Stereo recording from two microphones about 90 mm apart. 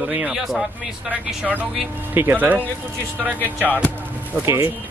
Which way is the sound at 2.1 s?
25° right (ahead or behind).